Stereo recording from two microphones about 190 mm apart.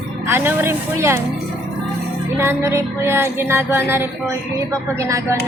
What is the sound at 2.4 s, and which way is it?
Speech, 15° right (ahead or behind).